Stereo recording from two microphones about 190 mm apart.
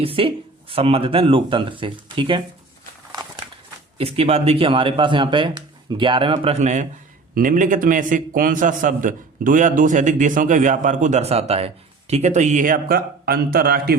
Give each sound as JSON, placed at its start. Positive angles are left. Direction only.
{"t": 0.0, "sound": "speech", "side_deg": -30}
{"t": 3.9, "sound": "a man's voice", "side_deg": -30}